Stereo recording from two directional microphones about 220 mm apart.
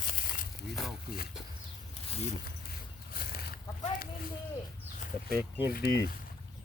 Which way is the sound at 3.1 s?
40° left (ahead or behind).